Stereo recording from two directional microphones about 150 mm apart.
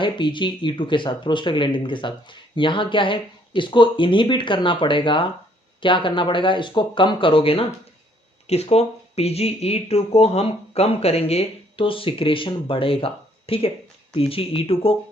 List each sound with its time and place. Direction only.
0.0 s speech: 30° left (ahead or behind)